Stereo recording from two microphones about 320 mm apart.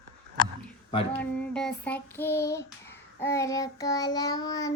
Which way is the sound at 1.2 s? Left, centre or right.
Centre.